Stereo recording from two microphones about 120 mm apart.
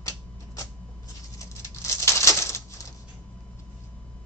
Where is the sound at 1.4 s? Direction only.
25° left (ahead or behind).